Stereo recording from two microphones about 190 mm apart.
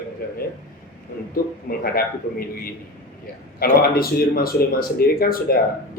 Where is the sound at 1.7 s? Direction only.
50° left (ahead or behind).